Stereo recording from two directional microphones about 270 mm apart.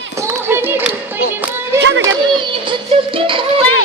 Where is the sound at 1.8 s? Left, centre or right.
Right.